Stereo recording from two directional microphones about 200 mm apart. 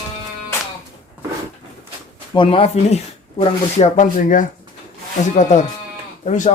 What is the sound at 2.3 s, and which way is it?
Speech, 25° left (ahead or behind).